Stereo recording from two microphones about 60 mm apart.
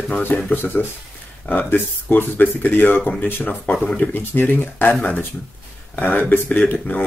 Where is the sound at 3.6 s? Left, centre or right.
Centre.